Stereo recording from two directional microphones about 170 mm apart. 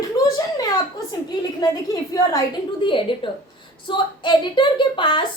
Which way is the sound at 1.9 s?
20° left (ahead or behind).